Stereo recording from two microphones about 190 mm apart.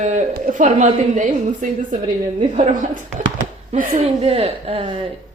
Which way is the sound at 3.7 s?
30° right (ahead or behind).